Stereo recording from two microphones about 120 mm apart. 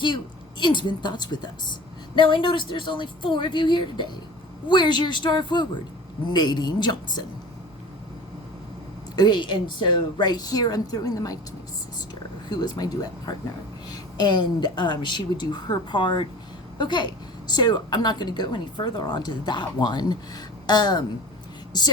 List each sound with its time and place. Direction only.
0.6 s a woman's voice: 40° left (ahead or behind)
9.1 s a woman's voice: 40° left (ahead or behind)
12.5 s a woman's voice: 35° left (ahead or behind)